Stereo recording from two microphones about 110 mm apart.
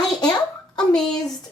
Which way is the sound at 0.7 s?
5° left (ahead or behind).